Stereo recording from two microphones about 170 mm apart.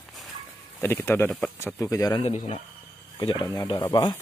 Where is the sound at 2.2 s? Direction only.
35° left (ahead or behind).